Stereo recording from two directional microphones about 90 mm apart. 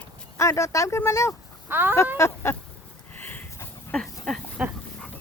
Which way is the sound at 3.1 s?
20° left (ahead or behind).